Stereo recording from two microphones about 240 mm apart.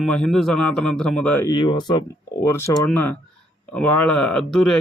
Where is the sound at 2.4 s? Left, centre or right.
Centre.